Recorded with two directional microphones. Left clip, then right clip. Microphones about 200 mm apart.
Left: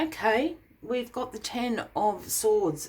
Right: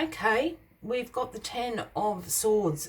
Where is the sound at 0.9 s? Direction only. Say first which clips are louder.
Even; 25° left (ahead or behind).